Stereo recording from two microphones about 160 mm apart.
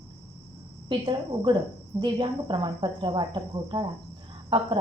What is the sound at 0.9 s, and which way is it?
Cricket, 30° right (ahead or behind).